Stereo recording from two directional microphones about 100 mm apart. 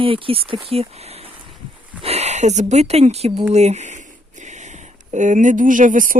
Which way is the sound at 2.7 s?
90° right.